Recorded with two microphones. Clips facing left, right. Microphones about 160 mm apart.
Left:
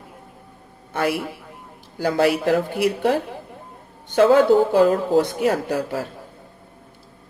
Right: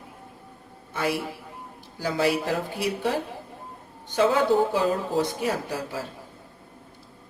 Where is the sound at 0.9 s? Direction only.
60° left (ahead or behind).